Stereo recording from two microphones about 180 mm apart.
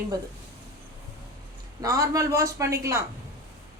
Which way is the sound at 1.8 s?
15° right (ahead or behind).